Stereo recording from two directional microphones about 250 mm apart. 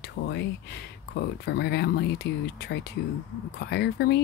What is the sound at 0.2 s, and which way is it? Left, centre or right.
Speech, left.